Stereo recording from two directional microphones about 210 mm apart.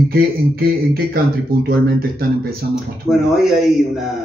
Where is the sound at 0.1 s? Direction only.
45° right (ahead or behind).